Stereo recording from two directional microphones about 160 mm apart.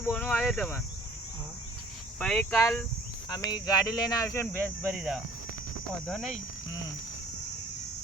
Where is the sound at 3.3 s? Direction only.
25° left (ahead or behind).